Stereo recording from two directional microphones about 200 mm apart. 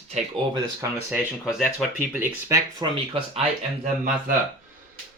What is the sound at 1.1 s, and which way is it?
Speech, 5° right (ahead or behind).